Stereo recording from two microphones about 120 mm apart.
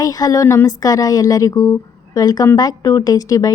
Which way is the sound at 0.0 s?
30° left (ahead or behind).